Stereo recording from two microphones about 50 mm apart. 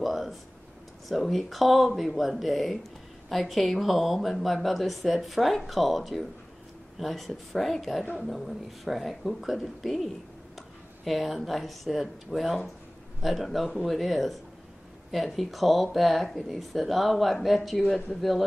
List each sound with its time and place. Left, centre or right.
0.0 s a sound: centre
1.0 s speech: centre
8.0 s a woman's voice: left
8.3 s speech: centre